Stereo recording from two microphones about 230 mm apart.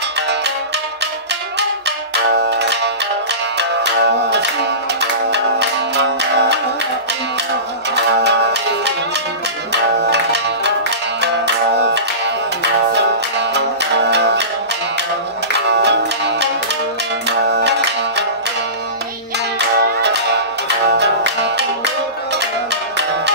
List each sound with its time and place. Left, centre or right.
2.3 s music: right
7.9 s music: right
9.7 s music: right
15.5 s music: right
19.8 s music: right